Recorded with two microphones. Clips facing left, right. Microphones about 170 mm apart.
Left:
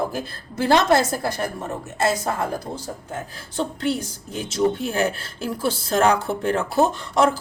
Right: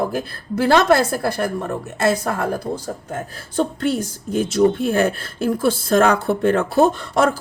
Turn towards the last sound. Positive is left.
turn(degrees=-55)  # may be behind; listen again after turning